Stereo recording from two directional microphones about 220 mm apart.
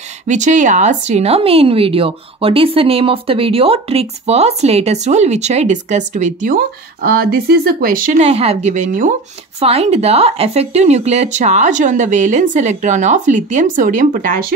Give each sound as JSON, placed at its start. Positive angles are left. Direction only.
{"t": 0.3, "sound": "speech", "side_deg": -35}